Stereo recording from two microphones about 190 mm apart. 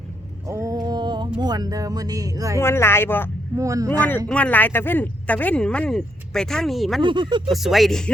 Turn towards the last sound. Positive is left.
turn(degrees=0)  # may be behind; listen again after turning